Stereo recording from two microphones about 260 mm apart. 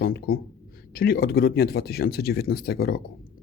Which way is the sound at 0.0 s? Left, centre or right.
Left.